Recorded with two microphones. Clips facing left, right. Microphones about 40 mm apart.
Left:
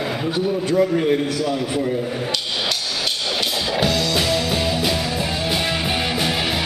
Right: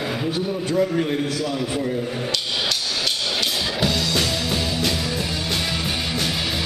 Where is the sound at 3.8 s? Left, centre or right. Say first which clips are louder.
Left 3 dB; centre.